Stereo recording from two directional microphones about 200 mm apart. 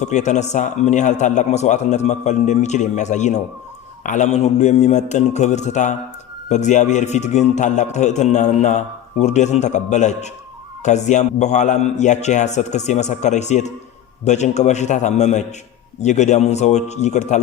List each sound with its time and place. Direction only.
0.0 s a man's voice: 35° left (ahead or behind)